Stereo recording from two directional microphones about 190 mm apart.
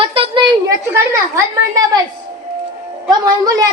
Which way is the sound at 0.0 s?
30° right (ahead or behind).